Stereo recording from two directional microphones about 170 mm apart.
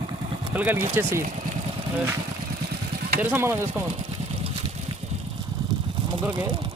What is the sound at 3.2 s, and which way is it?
Speech, 15° right (ahead or behind).